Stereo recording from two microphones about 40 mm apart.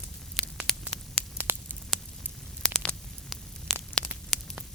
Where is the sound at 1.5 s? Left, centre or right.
Right.